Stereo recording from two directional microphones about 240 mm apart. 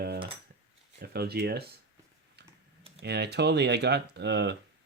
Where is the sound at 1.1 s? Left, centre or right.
Right.